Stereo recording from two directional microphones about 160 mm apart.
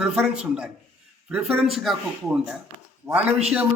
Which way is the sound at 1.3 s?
5° right (ahead or behind).